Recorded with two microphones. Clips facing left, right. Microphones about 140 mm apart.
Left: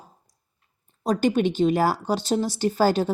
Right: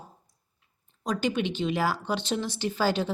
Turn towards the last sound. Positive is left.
turn(degrees=45)  # may be behind; listen again after turning